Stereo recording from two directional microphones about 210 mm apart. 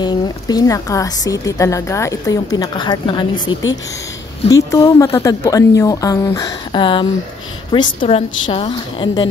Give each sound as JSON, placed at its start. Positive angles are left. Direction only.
{"t": 0.0, "sound": "a woman's voice", "side_deg": 20}